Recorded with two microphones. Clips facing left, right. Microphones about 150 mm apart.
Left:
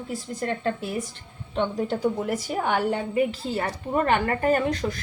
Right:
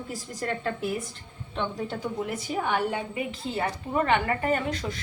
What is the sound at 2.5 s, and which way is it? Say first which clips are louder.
Speech: right 1 dB; 50° left (ahead or behind).